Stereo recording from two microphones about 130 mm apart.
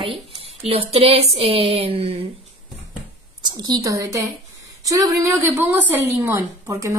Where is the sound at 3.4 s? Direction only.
30° right (ahead or behind).